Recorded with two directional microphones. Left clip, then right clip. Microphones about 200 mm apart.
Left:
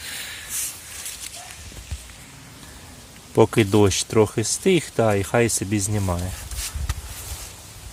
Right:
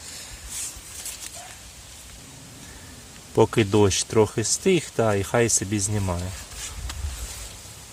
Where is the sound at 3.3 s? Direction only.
15° left (ahead or behind).